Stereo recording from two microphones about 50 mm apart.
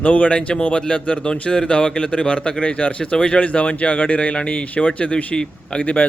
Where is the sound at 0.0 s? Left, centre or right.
Left.